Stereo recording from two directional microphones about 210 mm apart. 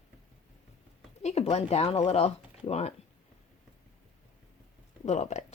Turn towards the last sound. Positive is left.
turn(degrees=30)  # may be behind; listen again after turning